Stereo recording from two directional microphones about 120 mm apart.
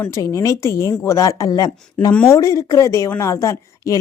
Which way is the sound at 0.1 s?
25° left (ahead or behind).